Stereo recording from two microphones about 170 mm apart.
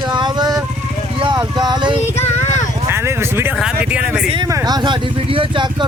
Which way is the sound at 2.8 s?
15° right (ahead or behind).